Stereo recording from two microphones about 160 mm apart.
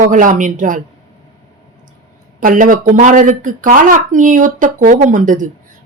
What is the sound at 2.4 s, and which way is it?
Speech, 55° right (ahead or behind).